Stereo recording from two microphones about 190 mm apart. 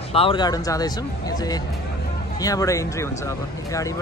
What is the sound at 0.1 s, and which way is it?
Speech, 30° left (ahead or behind).